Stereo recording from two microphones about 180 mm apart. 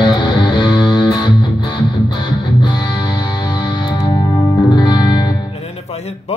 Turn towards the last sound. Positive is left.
turn(degrees=25)  # may be behind; listen again after turning